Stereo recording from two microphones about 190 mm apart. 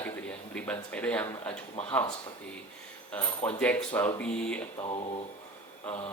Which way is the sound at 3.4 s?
5° left (ahead or behind).